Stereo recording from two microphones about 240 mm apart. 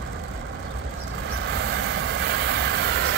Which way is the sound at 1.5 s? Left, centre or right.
Right.